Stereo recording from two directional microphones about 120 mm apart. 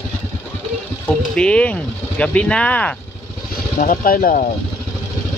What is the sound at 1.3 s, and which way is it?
Speech, 10° left (ahead or behind).